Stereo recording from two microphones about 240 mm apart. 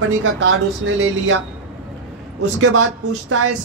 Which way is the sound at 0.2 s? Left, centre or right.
Right.